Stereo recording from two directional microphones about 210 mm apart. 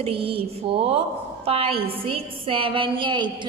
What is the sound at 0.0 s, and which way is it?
A woman's voice, 25° right (ahead or behind).